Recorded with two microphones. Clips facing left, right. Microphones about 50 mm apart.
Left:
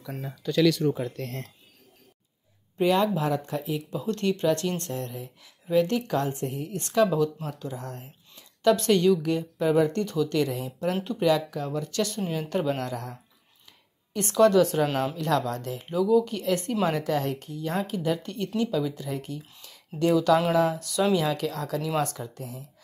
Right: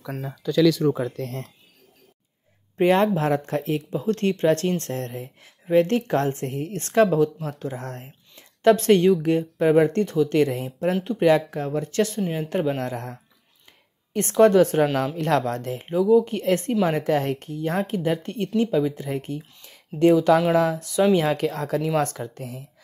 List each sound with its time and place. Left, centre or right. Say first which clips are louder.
2.8 s speech: right 4 dB; right
3.9 s speech: right 3 dB; right
7.2 s speech: right 4 dB; right
7.5 s speech: right 4 dB; right
20.5 s speech: right 3 dB; right
20.9 s speech: right 7 dB; right
21.2 s speech: right 4 dB; right